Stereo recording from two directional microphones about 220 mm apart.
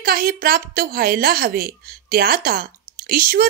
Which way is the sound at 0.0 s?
40° right (ahead or behind).